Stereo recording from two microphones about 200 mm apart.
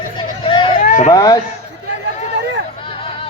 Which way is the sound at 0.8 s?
35° left (ahead or behind).